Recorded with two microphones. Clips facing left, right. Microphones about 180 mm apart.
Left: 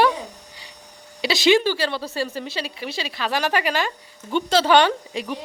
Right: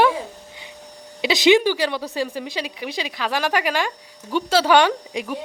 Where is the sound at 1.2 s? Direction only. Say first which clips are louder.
Right 2 dB; 20° right (ahead or behind).